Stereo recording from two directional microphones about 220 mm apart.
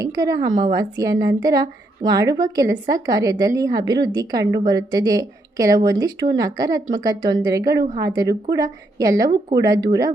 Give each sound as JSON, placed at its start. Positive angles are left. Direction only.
{"t": 0.0, "sound": "a woman's voice", "side_deg": -15}